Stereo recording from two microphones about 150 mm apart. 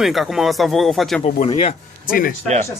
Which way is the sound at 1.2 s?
55° left (ahead or behind).